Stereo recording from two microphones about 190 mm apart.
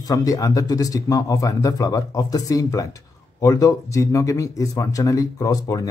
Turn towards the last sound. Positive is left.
turn(degrees=20)  # may be behind; listen again after turning